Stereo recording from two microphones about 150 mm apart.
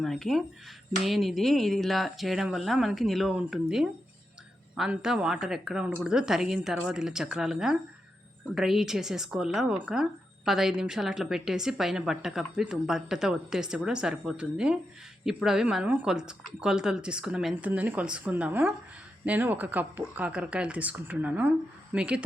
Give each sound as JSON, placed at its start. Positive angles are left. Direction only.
{"t": 0.0, "sound": "speech", "side_deg": 0}